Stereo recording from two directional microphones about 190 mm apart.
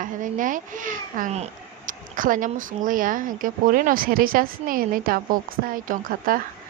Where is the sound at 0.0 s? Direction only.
45° right (ahead or behind).